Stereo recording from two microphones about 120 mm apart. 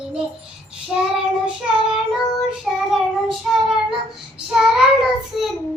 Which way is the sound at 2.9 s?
Centre (ahead or behind).